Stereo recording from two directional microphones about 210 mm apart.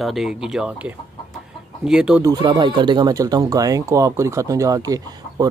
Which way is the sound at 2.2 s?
20° right (ahead or behind).